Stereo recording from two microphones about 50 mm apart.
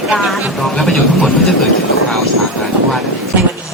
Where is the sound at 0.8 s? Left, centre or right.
Centre.